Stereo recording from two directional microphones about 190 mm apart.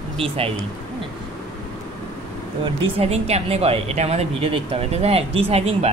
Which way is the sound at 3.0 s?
35° right (ahead or behind).